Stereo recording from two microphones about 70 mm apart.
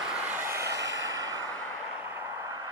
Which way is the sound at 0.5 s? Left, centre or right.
Right.